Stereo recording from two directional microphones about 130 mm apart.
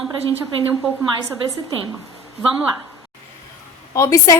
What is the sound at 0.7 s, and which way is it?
Speech, 15° right (ahead or behind).